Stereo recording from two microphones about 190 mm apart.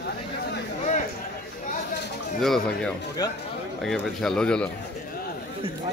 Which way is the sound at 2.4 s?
Centre (ahead or behind).